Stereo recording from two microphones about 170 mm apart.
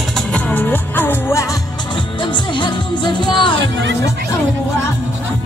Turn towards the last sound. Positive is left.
turn(degrees=30)  # may be behind; listen again after turning